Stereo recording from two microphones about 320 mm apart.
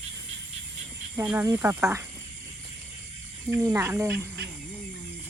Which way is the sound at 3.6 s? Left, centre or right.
Centre.